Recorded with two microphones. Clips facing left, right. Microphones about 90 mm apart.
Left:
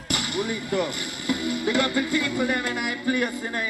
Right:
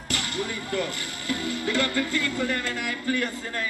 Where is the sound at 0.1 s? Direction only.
15° left (ahead or behind).